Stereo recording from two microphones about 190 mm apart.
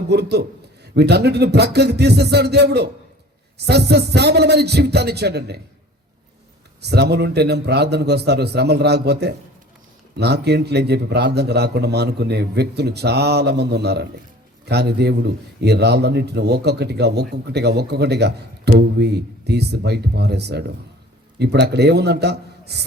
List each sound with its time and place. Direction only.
0.1 s a man's voice: 60° right (ahead or behind)
6.8 s a man's voice: 60° right (ahead or behind)